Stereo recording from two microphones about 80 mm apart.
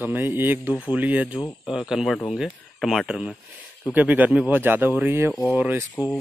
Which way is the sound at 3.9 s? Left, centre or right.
Centre.